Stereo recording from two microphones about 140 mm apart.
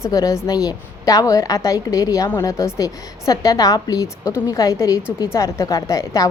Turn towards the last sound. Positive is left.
turn(degrees=25)  # may be behind; listen again after turning